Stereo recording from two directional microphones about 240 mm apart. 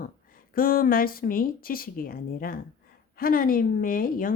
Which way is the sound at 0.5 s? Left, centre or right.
Left.